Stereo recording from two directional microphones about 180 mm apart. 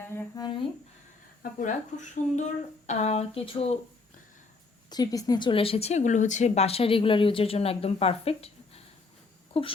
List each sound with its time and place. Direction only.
0.0 s speech: 15° left (ahead or behind)
1.4 s speech: 45° left (ahead or behind)
4.9 s speech: 20° left (ahead or behind)